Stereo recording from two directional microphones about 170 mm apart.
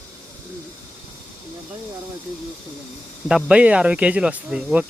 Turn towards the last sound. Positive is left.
turn(degrees=-5)  # may be behind; listen again after turning